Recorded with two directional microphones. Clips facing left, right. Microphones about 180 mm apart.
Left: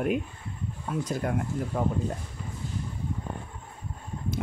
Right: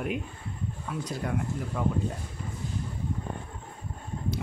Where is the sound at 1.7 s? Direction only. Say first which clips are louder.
Left 1 dB; 40° left (ahead or behind).